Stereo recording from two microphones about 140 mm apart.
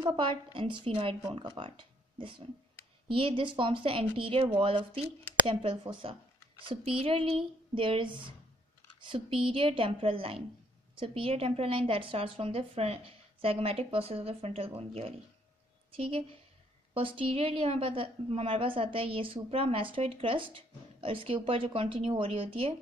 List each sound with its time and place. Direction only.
0.0 s a woman's voice: 40° right (ahead or behind)